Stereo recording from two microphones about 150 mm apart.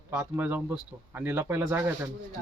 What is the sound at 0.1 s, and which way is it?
Speech, 10° right (ahead or behind).